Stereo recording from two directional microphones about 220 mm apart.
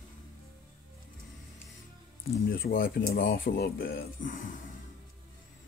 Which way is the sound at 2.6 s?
40° left (ahead or behind).